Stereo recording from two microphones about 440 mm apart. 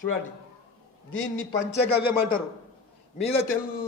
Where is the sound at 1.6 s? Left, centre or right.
Left.